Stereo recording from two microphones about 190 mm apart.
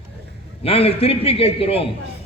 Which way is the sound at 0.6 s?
30° left (ahead or behind).